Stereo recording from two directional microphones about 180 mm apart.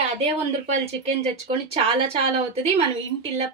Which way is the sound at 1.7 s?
35° right (ahead or behind).